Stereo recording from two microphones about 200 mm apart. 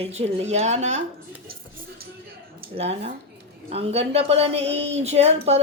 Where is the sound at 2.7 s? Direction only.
30° right (ahead or behind).